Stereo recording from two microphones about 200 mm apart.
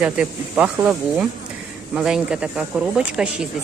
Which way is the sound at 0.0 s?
5° right (ahead or behind).